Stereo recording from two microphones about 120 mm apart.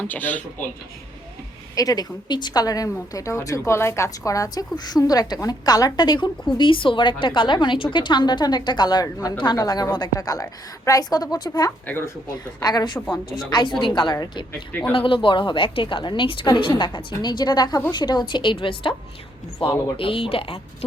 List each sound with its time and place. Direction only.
0.0 s speech: 15° left (ahead or behind)
1.7 s a woman's voice: 30° left (ahead or behind)
11.9 s a woman's voice: 20° left (ahead or behind)
12.5 s a woman's voice: 35° left (ahead or behind)
14.7 s speech: 15° left (ahead or behind)
14.9 s a woman's voice: 45° left (ahead or behind)